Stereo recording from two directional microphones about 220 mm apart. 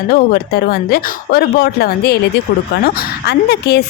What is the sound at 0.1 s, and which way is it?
A woman's voice, 45° left (ahead or behind).